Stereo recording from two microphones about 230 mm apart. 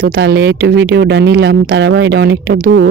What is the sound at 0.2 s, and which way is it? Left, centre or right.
Speech, right.